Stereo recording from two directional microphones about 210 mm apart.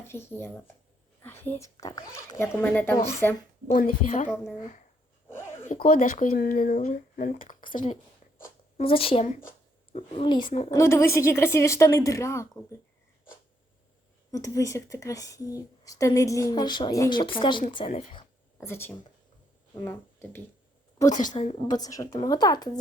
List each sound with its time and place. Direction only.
0.1 s a woman's voice: 10° left (ahead or behind)
2.6 s a woman's voice: 10° left (ahead or behind)
3.7 s a woman's voice: 40° left (ahead or behind)
5.6 s speech: 40° left (ahead or behind)
8.8 s speech: 25° left (ahead or behind)
10.7 s a woman's voice: 15° left (ahead or behind)
14.3 s a woman's voice: 15° left (ahead or behind)
18.5 s speech: 10° left (ahead or behind)
21.2 s a woman's voice: 25° left (ahead or behind)